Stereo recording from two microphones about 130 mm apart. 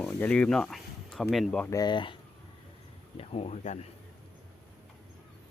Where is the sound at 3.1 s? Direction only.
50° left (ahead or behind).